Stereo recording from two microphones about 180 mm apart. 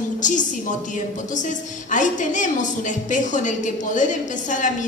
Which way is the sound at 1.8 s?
45° left (ahead or behind).